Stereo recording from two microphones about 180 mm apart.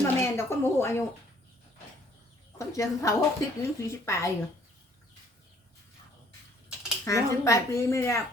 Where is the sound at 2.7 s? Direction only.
20° left (ahead or behind).